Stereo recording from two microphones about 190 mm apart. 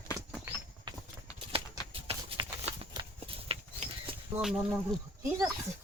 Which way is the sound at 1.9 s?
30° right (ahead or behind).